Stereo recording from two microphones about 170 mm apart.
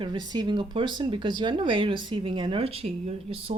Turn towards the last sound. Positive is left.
turn(degrees=-35)  # may be behind; listen again after turning